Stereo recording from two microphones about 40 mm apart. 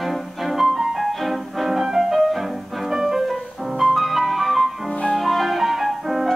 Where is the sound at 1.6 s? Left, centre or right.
Centre.